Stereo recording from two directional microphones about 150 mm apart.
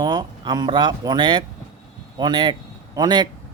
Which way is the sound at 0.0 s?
30° right (ahead or behind).